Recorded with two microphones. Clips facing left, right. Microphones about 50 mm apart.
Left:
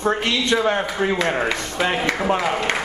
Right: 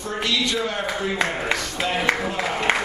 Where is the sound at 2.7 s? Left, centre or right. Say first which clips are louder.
Right 2 dB; centre.